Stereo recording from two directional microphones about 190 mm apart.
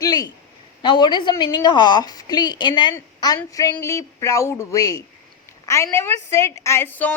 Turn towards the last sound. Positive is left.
turn(degrees=10)  # may be behind; listen again after turning